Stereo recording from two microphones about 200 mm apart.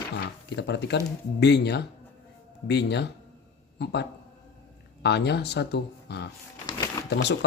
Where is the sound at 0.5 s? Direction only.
60° left (ahead or behind).